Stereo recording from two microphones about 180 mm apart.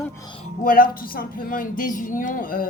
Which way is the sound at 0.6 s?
50° left (ahead or behind).